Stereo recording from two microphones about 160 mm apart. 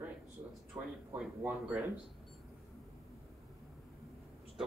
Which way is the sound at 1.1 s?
10° right (ahead or behind).